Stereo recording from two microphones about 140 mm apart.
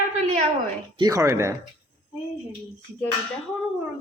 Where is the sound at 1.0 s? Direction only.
20° right (ahead or behind).